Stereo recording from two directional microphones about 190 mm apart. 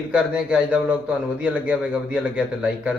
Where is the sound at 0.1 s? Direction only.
5° right (ahead or behind).